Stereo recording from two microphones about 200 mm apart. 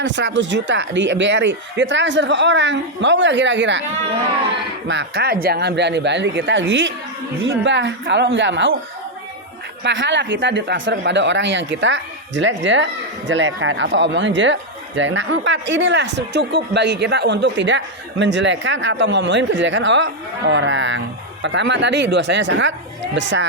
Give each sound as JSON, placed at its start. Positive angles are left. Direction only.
{"t": 0.0, "sound": "speech", "side_deg": -65}
{"t": 4.9, "sound": "speech", "side_deg": -60}
{"t": 9.8, "sound": "speech", "side_deg": -65}